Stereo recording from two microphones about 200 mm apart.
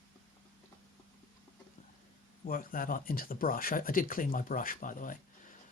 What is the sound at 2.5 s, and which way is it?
Speech, 45° left (ahead or behind).